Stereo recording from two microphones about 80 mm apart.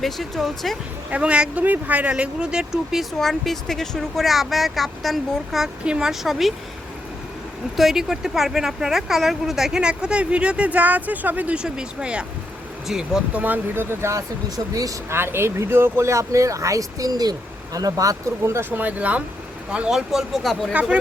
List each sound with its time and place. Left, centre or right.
0.0 s speech: centre
1.1 s speech: centre
7.8 s speech: centre
13.4 s speech: right
14.5 s speech: right
15.1 s speech: right
18.7 s speech: centre